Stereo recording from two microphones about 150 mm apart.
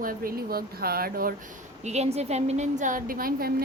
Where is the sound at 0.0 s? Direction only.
75° right (ahead or behind).